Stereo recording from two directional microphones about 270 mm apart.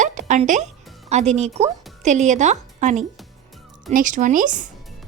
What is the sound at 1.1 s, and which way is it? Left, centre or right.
Speech, right.